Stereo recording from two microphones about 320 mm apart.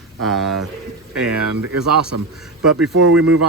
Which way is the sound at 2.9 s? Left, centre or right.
Right.